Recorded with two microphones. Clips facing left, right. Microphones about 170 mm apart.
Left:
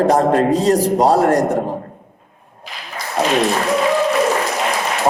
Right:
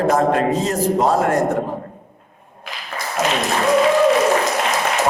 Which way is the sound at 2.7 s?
55° right (ahead or behind).